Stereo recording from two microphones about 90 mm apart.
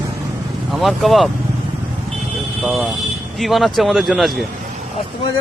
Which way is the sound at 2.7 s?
Centre (ahead or behind).